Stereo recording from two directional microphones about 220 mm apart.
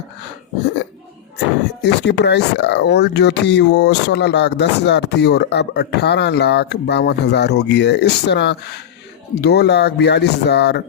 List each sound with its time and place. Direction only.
1.8 s speech: 50° left (ahead or behind)